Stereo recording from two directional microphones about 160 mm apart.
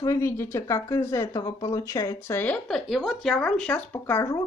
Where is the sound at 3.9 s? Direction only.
15° left (ahead or behind).